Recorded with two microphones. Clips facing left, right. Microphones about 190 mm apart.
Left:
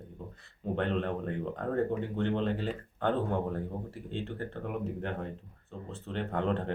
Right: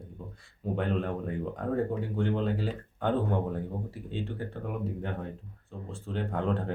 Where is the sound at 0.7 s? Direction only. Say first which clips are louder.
Right 1 dB; 5° right (ahead or behind).